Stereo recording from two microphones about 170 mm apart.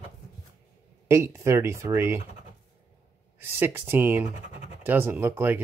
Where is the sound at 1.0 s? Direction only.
15° right (ahead or behind).